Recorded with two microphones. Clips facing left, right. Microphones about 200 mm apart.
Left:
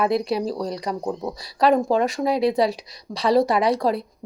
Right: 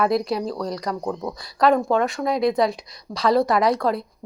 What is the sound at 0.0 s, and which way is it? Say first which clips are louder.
A woman's voice: even; 30° left (ahead or behind).